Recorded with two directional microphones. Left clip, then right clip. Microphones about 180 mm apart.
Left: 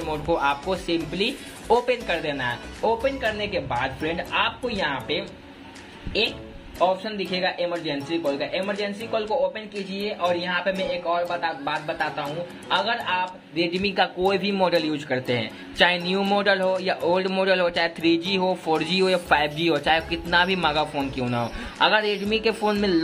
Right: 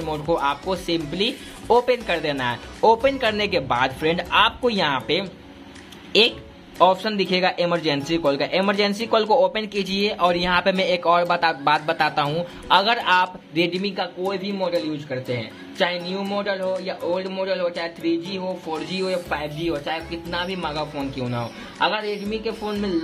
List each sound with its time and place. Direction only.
0.0 s speech: 10° right (ahead or behind)
2.9 s speech: 30° right (ahead or behind)
6.8 s speech: 35° right (ahead or behind)
13.7 s a man's voice: centre (ahead or behind)
14.2 s a man's voice: 15° left (ahead or behind)
16.2 s a man's voice: 15° left (ahead or behind)